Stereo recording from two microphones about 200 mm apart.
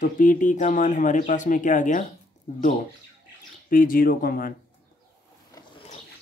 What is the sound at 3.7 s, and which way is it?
Speech, 45° left (ahead or behind).